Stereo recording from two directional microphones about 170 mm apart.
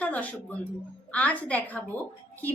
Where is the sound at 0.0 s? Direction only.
10° left (ahead or behind).